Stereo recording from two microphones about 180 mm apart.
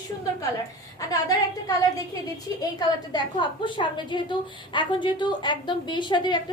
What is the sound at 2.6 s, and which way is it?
A woman's voice, 20° left (ahead or behind).